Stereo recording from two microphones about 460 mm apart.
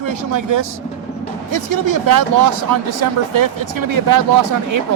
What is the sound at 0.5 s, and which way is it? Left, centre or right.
Speech, right.